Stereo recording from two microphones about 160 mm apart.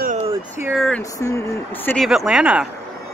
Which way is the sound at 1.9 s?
Centre (ahead or behind).